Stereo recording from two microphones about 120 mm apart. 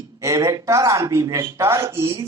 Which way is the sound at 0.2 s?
30° right (ahead or behind).